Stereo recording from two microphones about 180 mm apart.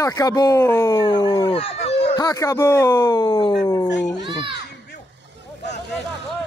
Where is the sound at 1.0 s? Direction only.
25° left (ahead or behind).